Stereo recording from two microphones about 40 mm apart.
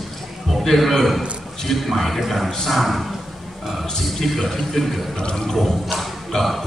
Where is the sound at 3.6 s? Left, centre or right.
Centre.